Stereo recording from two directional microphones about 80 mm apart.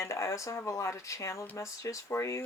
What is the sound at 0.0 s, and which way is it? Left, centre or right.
Speech, left.